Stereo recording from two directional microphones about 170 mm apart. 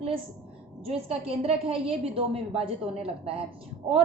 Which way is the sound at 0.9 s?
35° right (ahead or behind).